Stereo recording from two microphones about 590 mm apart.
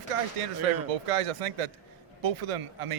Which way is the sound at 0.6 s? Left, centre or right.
Right.